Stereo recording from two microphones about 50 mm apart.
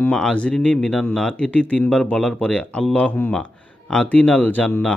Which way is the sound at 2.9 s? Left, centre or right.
Left.